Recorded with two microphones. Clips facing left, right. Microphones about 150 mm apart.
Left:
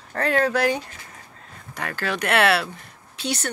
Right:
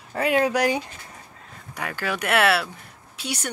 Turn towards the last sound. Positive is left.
turn(degrees=-10)  # may be behind; listen again after turning